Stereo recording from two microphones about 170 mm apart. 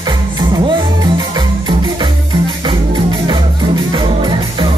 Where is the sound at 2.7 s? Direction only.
30° right (ahead or behind).